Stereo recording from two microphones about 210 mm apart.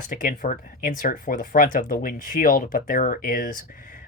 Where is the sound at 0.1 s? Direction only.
40° left (ahead or behind).